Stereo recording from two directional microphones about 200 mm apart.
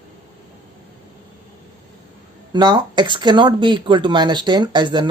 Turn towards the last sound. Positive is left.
turn(degrees=-20)  # may be behind; listen again after turning